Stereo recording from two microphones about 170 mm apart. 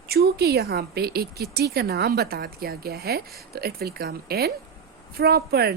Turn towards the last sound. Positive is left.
turn(degrees=-70)  # may be behind; listen again after turning